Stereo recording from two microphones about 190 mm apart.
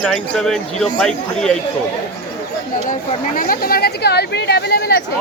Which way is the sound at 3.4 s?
50° left (ahead or behind).